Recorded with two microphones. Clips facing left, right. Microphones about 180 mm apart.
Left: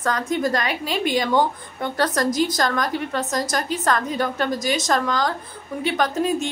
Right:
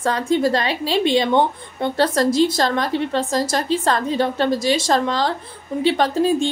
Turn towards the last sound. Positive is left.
turn(degrees=-30)  # may be behind; listen again after turning